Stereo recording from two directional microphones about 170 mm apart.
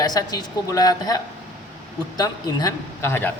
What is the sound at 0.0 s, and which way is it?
A woman's voice, 20° left (ahead or behind).